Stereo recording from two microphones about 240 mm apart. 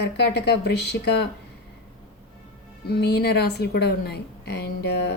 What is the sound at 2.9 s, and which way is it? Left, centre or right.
A woman's voice, left.